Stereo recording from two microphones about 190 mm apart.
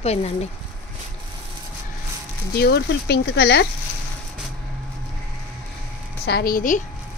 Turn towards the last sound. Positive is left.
turn(degrees=45)  # may be behind; listen again after turning